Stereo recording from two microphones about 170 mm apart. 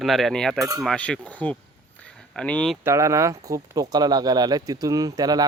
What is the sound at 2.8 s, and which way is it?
Speech, 15° right (ahead or behind).